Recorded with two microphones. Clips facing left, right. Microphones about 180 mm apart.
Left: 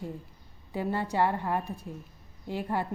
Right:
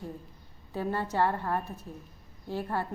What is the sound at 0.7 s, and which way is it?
A woman's voice, 15° left (ahead or behind).